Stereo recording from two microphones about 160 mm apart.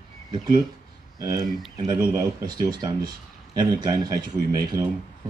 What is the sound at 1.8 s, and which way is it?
Speech, 20° right (ahead or behind).